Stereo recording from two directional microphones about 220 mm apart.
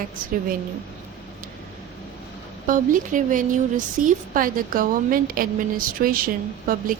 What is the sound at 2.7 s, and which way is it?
Speech, 40° right (ahead or behind).